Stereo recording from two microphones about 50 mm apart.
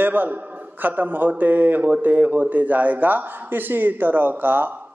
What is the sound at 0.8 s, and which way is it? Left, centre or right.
A man's voice, right.